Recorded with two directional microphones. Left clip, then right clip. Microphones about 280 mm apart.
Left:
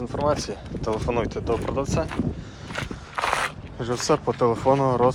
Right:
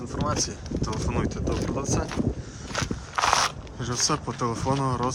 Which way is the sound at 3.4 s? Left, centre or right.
Centre.